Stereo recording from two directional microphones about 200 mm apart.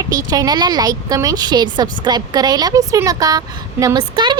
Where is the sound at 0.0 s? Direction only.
15° right (ahead or behind).